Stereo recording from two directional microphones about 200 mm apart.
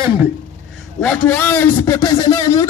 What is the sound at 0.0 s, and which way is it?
Speech, 15° right (ahead or behind).